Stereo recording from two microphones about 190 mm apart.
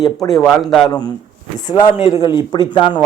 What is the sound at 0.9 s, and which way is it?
A man's voice, 20° left (ahead or behind).